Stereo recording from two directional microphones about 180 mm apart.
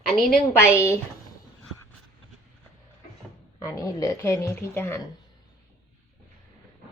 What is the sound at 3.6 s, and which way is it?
Speech, 20° left (ahead or behind).